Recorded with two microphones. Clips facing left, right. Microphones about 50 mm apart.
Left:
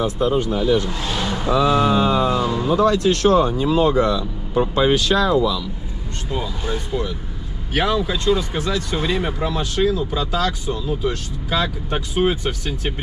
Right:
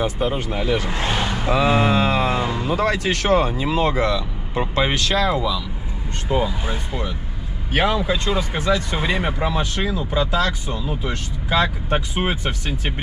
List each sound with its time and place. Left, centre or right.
0.2 s speech: right
1.5 s speech: right
1.9 s music: right
2.5 s speech: right
3.6 s speech: right
4.9 s speech: centre
5.3 s speech: centre